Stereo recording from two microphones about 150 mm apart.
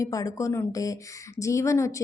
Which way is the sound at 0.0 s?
20° left (ahead or behind).